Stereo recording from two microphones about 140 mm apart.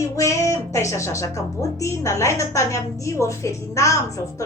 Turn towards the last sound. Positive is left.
turn(degrees=20)  # may be behind; listen again after turning